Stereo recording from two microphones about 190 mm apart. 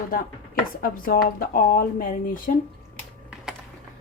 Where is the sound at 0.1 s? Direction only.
50° left (ahead or behind).